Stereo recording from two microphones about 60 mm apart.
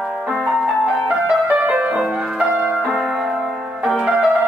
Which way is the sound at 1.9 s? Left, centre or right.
Centre.